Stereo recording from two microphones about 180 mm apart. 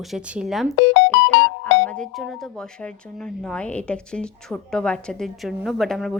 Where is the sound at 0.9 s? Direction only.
85° left.